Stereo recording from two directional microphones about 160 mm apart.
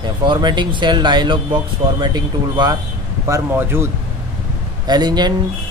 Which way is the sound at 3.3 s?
15° right (ahead or behind).